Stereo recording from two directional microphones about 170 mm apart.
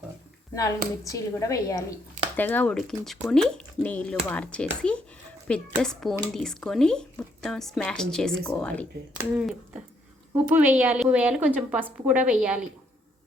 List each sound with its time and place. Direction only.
1.0 s a woman's voice: 20° left (ahead or behind)
9.1 s a woman's voice: 5° right (ahead or behind)